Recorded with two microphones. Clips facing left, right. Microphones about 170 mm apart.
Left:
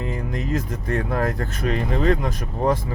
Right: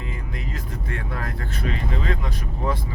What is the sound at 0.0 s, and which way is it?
Speech, 45° left (ahead or behind).